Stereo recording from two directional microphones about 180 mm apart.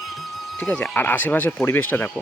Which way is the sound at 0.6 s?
10° left (ahead or behind).